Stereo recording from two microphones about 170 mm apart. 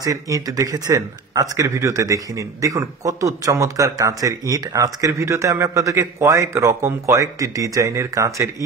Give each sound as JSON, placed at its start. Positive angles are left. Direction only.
{"t": 0.0, "sound": "speech", "side_deg": -20}